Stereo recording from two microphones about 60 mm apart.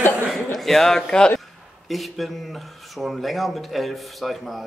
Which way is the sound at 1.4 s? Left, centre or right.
Centre.